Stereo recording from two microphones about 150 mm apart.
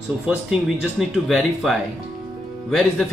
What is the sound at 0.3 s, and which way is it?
Speech, 5° right (ahead or behind).